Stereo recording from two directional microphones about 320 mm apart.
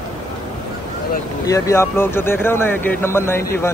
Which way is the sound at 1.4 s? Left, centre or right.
Centre.